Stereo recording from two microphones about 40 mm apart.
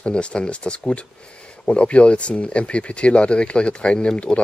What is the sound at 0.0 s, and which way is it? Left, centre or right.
Speech, left.